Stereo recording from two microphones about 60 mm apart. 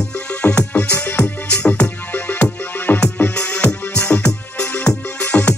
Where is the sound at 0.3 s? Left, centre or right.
Left.